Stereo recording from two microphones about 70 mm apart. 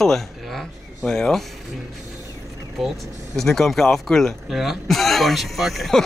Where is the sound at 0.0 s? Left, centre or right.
Centre.